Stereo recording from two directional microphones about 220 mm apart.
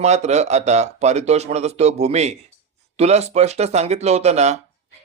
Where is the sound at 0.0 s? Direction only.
30° right (ahead or behind).